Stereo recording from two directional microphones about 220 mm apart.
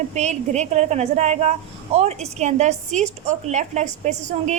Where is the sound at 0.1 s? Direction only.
30° right (ahead or behind).